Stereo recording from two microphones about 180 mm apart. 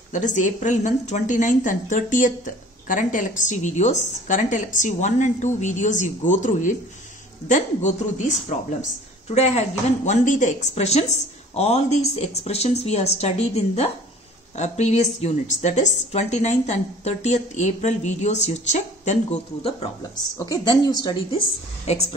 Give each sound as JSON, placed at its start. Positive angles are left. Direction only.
{"t": 0.1, "sound": "a woman's voice", "side_deg": 45}
{"t": 20.3, "sound": "a woman's voice", "side_deg": 20}
{"t": 21.8, "sound": "a woman's voice", "side_deg": 35}